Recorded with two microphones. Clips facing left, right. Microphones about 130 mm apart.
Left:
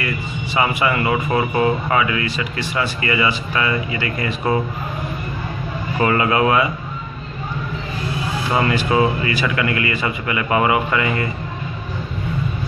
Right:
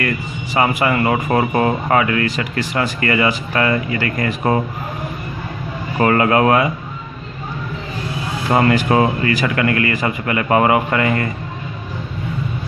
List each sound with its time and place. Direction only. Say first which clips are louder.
0.6 s speech: right 3 dB; 45° right (ahead or behind)
5.9 s speech: right 3 dB; 45° right (ahead or behind)
8.5 s speech: right 4 dB; 50° right (ahead or behind)